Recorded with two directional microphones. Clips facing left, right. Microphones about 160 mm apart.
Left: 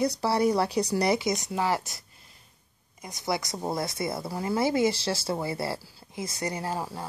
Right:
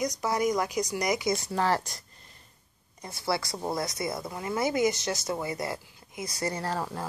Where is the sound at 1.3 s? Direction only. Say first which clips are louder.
Right 1 dB; 15° left (ahead or behind).